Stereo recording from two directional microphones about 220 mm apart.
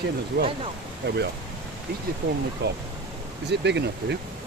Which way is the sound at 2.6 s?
50° right (ahead or behind).